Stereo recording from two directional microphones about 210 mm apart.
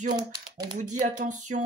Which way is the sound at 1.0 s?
35° right (ahead or behind).